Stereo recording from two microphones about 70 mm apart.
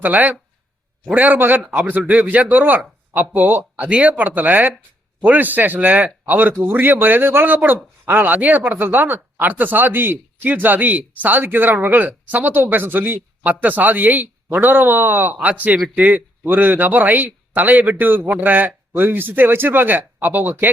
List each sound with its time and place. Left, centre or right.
0.0 s speech: right
1.6 s speech: centre
1.9 s speech: right